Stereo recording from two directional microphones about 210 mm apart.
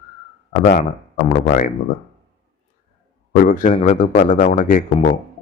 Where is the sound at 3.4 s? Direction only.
40° left (ahead or behind).